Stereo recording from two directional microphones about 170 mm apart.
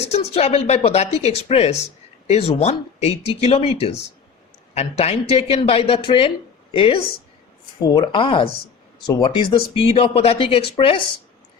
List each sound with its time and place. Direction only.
0.1 s a man's voice: 40° left (ahead or behind)